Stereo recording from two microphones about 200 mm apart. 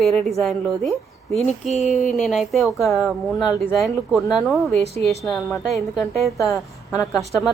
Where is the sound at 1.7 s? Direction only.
35° left (ahead or behind).